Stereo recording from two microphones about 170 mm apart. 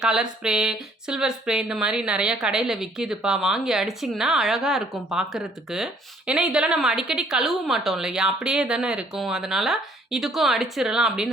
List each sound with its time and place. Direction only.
0.0 s speech: 5° right (ahead or behind)